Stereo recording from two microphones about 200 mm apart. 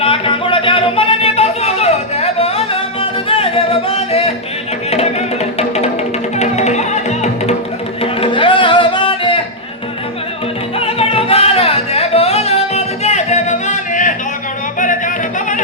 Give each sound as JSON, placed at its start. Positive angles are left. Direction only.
{"t": 0.0, "sound": "music", "side_deg": 25}
{"t": 5.5, "sound": "music", "side_deg": 30}
{"t": 8.0, "sound": "music", "side_deg": 25}
{"t": 10.8, "sound": "music", "side_deg": 30}